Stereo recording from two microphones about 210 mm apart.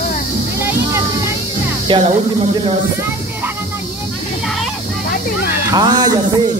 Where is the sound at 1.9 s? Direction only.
30° right (ahead or behind).